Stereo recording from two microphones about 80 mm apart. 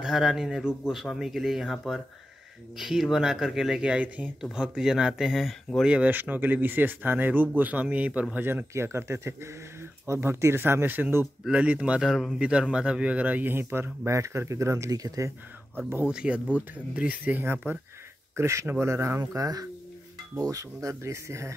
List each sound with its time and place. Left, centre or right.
0.0 s speech: centre
5.9 s a man's voice: centre; by 15.3 s right
16.1 s a man's voice: centre
18.3 s speech: right
19.3 s speech: right